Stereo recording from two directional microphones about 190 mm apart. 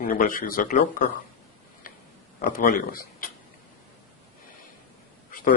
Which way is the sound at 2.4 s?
50° left (ahead or behind).